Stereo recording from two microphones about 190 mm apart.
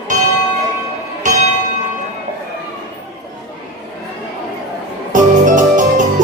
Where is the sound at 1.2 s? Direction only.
40° right (ahead or behind).